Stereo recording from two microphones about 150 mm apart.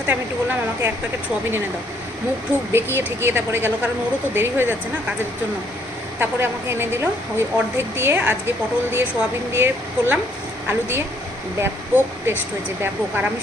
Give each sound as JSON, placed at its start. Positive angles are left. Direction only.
{"t": 0.1, "sound": "a woman's voice", "side_deg": -10}
{"t": 2.7, "sound": "a woman's voice", "side_deg": -15}
{"t": 6.1, "sound": "a woman's voice", "side_deg": -15}